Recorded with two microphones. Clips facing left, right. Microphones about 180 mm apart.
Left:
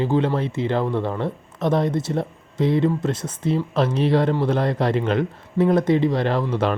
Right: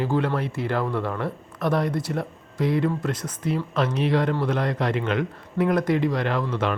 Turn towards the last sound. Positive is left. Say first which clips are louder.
# left 4 dB
turn(degrees=30)  # may be behind; listen again after turning